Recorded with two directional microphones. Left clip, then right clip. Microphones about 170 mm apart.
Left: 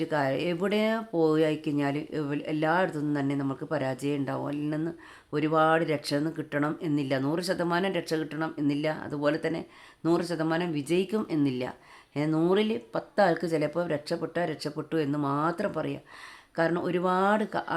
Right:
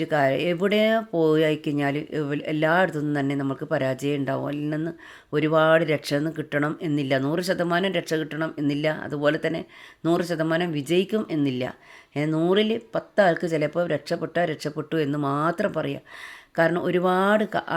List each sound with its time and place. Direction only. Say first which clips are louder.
0.0 s speech: right 6 dB; 20° right (ahead or behind)